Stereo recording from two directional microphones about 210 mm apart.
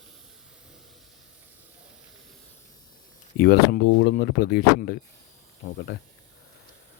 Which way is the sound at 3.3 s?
45° left (ahead or behind).